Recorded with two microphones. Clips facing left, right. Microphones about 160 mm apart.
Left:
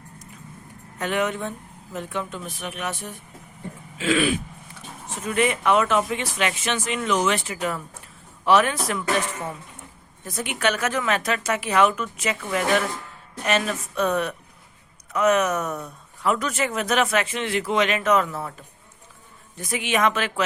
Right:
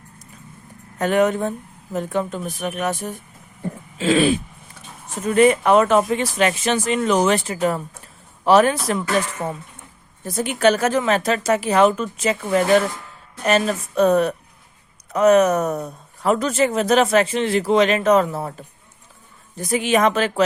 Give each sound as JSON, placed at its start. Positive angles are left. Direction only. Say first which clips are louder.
{"t": 0.9, "sound": "speech", "louder": "right 7 dB", "side_deg": -40}
{"t": 3.9, "sound": "a sound", "louder": "right 5 dB", "side_deg": -30}
{"t": 5.2, "sound": "speech", "louder": "right 7 dB", "side_deg": -40}
{"t": 10.2, "sound": "speech", "louder": "right 8 dB", "side_deg": -35}